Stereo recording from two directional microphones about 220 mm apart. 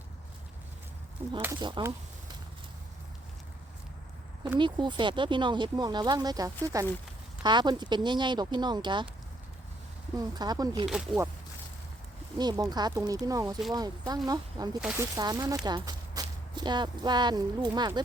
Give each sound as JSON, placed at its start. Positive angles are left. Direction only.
{"t": 1.5, "sound": "speech", "side_deg": -20}
{"t": 4.5, "sound": "speech", "side_deg": -20}
{"t": 10.2, "sound": "speech", "side_deg": -20}
{"t": 10.8, "sound": "speech", "side_deg": 0}
{"t": 12.4, "sound": "speech", "side_deg": -20}
{"t": 14.8, "sound": "speech", "side_deg": -5}
{"t": 15.1, "sound": "speech", "side_deg": -15}